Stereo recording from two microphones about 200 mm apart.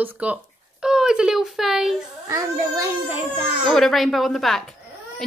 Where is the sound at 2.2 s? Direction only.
15° right (ahead or behind).